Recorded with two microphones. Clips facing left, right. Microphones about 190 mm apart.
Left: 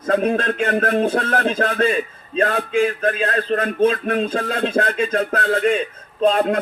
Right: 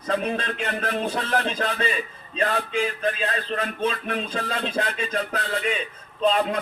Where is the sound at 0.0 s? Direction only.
50° left (ahead or behind).